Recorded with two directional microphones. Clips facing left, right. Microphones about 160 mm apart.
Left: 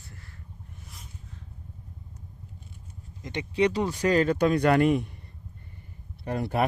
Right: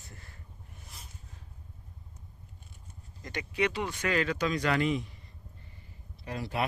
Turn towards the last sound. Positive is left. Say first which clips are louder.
# left 6 dB
turn(degrees=55)  # may be behind; listen again after turning